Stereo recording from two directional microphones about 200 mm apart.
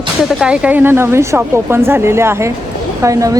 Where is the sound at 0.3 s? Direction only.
5° right (ahead or behind).